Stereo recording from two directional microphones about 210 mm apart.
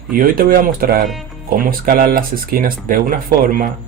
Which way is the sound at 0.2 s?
45° right (ahead or behind).